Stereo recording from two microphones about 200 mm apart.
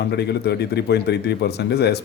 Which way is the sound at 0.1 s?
55° left (ahead or behind).